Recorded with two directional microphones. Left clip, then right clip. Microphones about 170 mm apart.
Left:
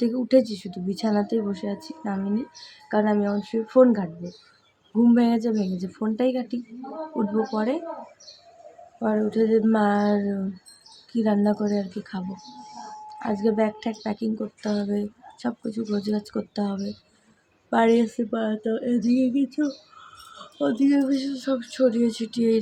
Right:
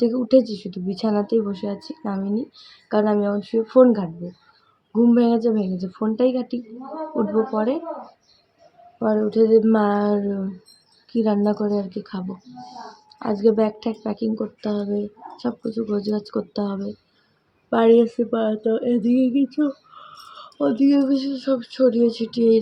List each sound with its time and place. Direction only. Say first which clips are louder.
0.0 s speech: right 3 dB; 15° left (ahead or behind)
9.0 s speech: right 5 dB; 10° left (ahead or behind)